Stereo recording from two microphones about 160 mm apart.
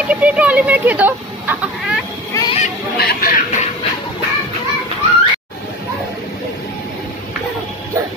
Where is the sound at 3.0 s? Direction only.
80° left.